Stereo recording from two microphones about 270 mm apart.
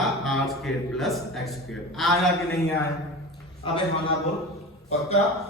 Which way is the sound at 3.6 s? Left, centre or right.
Centre.